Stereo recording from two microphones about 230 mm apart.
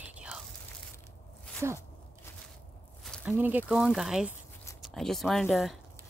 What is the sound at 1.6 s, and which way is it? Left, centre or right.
Speech, centre.